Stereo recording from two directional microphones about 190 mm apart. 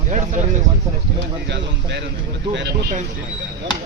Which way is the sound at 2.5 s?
65° right (ahead or behind).